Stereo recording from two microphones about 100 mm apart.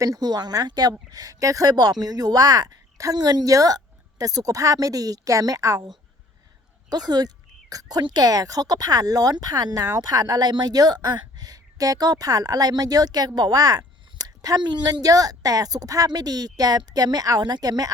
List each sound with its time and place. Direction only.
0.0 s speech: 40° right (ahead or behind)
6.9 s speech: 45° right (ahead or behind)